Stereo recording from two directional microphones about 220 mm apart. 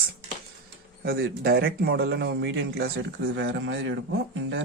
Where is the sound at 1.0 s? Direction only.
45° right (ahead or behind).